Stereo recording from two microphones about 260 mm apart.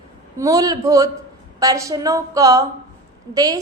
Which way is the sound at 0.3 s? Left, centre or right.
Centre.